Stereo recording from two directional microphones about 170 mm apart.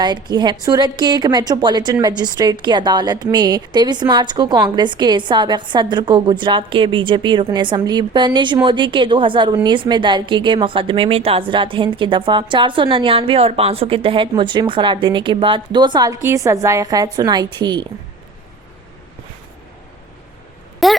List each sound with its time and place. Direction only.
0.0 s a woman's voice: 25° right (ahead or behind)
20.8 s speech: centre (ahead or behind)